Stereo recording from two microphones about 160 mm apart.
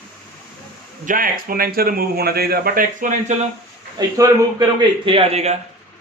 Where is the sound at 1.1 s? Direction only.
60° right (ahead or behind).